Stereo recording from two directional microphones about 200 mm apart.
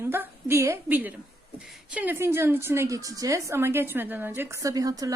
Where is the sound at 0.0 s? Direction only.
10° right (ahead or behind).